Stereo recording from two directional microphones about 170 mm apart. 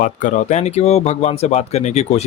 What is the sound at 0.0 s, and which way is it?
Speech, 50° left (ahead or behind).